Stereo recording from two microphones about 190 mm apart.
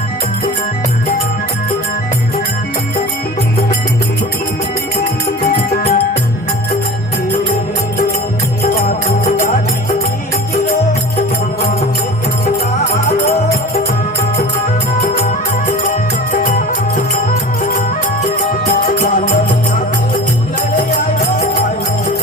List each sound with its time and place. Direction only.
5.7 s music: 45° left (ahead or behind)
15.9 s music: 45° left (ahead or behind)
18.9 s music: 45° left (ahead or behind)